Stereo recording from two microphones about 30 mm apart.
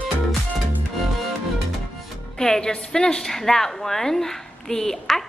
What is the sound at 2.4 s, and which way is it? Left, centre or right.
Music, centre.